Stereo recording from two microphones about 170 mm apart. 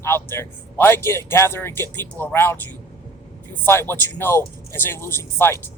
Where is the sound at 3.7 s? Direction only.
15° left (ahead or behind).